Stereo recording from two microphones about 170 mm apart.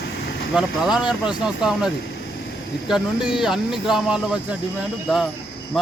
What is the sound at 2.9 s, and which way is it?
Speech, 5° right (ahead or behind).